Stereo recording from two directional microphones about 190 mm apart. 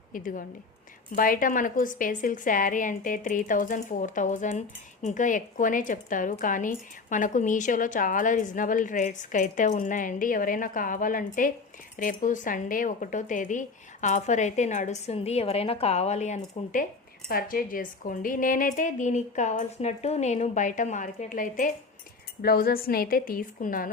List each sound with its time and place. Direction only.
0.1 s a woman's voice: 45° left (ahead or behind)
17.2 s a woman's voice: 50° left (ahead or behind)